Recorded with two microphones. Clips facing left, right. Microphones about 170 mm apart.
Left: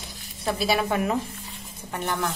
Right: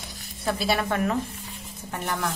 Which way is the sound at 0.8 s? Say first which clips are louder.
Left 1 dB; 10° left (ahead or behind).